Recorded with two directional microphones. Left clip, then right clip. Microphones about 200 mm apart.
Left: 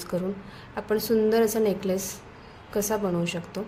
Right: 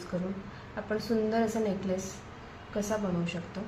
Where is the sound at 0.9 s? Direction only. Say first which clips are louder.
Left 8 dB; 60° left (ahead or behind).